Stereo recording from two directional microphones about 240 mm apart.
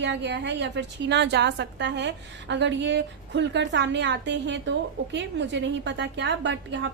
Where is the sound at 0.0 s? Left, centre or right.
Right.